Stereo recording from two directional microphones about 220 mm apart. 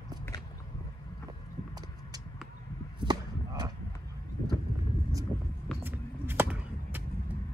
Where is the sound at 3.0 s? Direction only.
20° right (ahead or behind).